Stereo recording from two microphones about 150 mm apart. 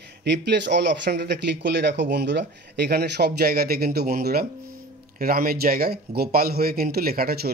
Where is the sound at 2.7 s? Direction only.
90° right.